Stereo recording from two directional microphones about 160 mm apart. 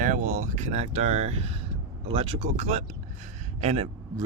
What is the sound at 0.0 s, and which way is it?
Speech, 55° right (ahead or behind).